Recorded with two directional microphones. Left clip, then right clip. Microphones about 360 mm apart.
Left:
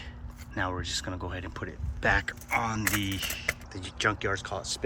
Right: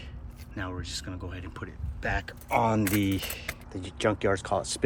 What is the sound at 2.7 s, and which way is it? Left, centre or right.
Speech, centre.